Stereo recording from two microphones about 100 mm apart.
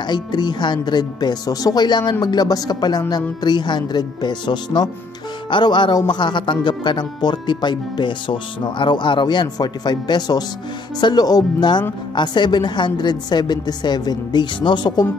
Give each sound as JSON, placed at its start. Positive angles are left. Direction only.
{"t": 0.0, "sound": "speech", "side_deg": 45}